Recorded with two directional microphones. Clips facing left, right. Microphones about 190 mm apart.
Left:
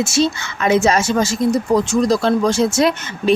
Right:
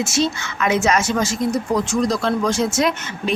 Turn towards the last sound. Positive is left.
turn(degrees=30)  # may be behind; listen again after turning